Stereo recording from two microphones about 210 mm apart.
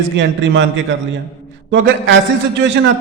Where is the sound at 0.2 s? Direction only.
60° right (ahead or behind).